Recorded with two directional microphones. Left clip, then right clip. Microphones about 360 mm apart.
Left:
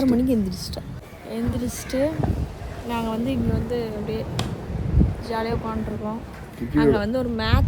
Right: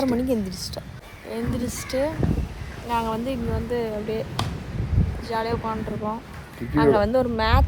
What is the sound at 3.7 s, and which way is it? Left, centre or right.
Speech, centre.